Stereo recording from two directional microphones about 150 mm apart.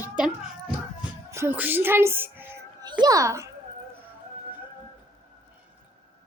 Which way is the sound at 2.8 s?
25° right (ahead or behind).